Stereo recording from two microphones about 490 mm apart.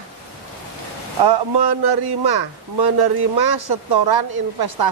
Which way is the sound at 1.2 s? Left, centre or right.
Right.